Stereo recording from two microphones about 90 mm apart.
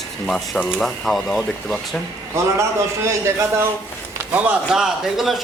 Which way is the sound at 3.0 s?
30° right (ahead or behind).